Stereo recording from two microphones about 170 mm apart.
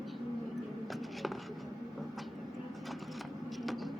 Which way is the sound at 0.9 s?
Centre (ahead or behind).